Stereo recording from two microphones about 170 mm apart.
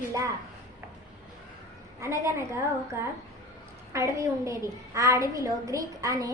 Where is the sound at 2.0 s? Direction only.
15° right (ahead or behind).